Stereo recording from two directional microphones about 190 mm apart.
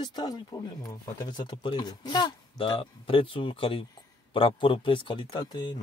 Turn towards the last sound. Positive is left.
turn(degrees=20)  # may be behind; listen again after turning